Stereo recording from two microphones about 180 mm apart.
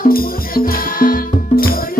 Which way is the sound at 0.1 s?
55° left (ahead or behind).